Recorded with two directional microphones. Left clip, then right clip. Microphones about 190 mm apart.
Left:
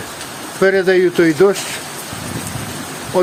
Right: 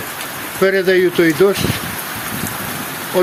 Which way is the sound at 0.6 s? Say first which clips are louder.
Left 1 dB; 10° left (ahead or behind).